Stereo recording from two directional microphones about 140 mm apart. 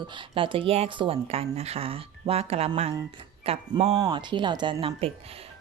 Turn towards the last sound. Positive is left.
turn(degrees=-45)  # may be behind; listen again after turning